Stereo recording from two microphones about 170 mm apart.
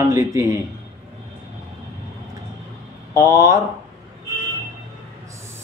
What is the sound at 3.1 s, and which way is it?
Speech, 20° right (ahead or behind).